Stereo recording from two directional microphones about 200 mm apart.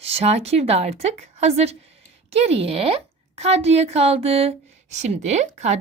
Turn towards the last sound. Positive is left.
turn(degrees=-35)  # may be behind; listen again after turning